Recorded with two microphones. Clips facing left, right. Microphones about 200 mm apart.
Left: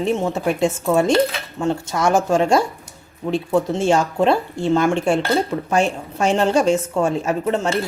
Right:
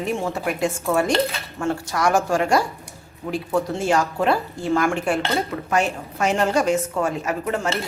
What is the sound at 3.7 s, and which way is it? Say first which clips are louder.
Speech: left 3 dB; 25° left (ahead or behind).